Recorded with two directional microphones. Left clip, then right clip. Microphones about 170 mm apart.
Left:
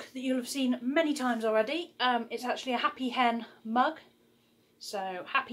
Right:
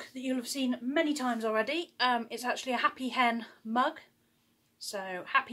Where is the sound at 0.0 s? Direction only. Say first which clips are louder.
Left 2 dB; 15° right (ahead or behind).